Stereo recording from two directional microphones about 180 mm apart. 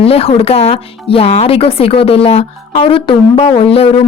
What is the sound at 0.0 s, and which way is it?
Speech, 35° left (ahead or behind).